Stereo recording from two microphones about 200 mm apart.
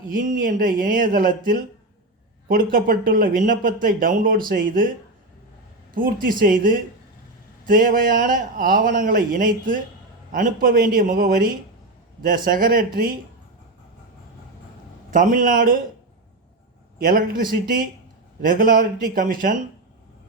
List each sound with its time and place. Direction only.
0.1 s speech: 40° right (ahead or behind)
2.7 s speech: 45° right (ahead or behind)
15.1 s speech: 40° right (ahead or behind)
17.0 s speech: 45° right (ahead or behind)